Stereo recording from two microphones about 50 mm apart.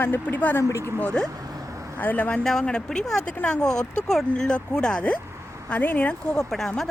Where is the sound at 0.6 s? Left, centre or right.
Left.